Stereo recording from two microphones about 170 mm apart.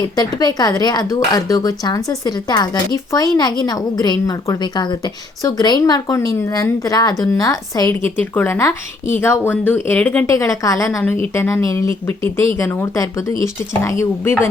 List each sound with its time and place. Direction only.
0.2 s a woman's voice: 25° left (ahead or behind)